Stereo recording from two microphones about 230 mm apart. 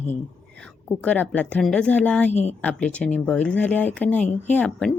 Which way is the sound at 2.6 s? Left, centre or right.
Centre.